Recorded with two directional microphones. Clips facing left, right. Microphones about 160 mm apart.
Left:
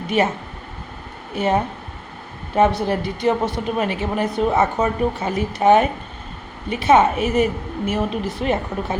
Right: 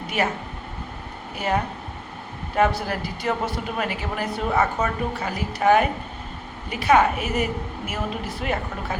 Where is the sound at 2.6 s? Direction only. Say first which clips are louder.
Left 4 dB; 25° left (ahead or behind).